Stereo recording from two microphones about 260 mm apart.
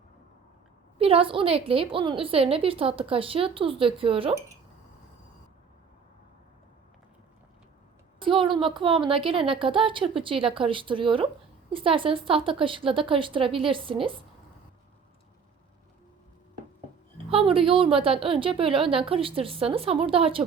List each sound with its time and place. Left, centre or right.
0.9 s a woman's voice: right
8.2 s a woman's voice: centre
17.3 s a woman's voice: right